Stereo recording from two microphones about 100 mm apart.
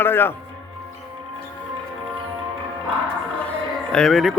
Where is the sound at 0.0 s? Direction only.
20° left (ahead or behind).